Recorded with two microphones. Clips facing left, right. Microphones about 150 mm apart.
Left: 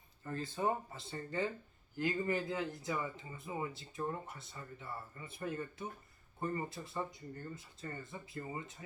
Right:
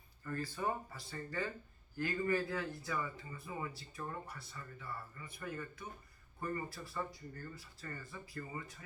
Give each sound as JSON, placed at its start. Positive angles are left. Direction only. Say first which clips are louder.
{"t": 0.3, "sound": "speech", "louder": "left 3 dB", "side_deg": 20}